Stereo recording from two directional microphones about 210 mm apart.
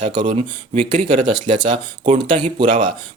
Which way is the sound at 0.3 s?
30° right (ahead or behind).